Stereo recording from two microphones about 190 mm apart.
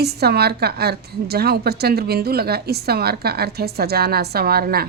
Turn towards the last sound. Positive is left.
turn(degrees=-55)  # may be behind; listen again after turning